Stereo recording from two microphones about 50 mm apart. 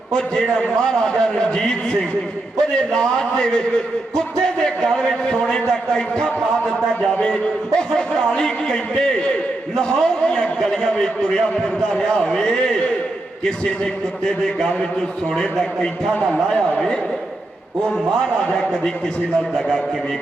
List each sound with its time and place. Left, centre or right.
0.1 s a man's voice: centre
7.8 s a man's voice: centre
17.8 s a man's voice: centre
19.5 s a man's voice: centre